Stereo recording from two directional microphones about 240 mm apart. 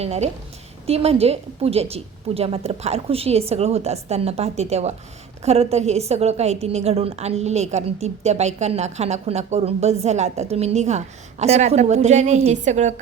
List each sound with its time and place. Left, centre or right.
0.0 s a woman's voice: right